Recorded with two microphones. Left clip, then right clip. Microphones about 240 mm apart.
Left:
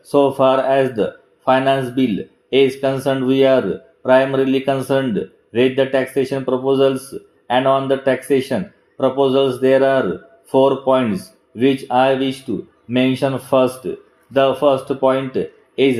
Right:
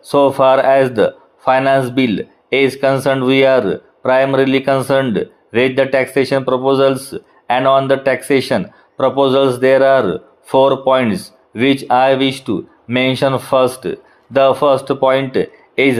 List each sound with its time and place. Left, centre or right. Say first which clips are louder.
0.1 s speech: right 3 dB; centre